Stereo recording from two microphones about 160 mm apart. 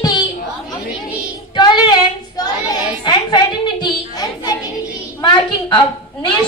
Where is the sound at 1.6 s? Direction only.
30° left (ahead or behind).